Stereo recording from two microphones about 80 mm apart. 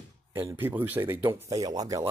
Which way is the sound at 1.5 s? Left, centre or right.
Right.